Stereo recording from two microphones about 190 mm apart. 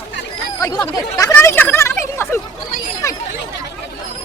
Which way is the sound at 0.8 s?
15° left (ahead or behind).